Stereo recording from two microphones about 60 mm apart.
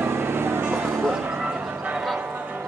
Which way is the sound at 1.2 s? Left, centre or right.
Right.